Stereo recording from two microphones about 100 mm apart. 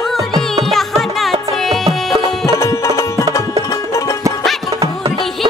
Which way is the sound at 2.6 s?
30° left (ahead or behind).